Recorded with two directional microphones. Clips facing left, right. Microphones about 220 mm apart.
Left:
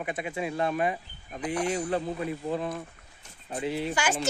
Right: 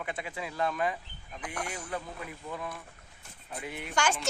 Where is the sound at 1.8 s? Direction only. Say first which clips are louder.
Left 9 dB; 40° left (ahead or behind).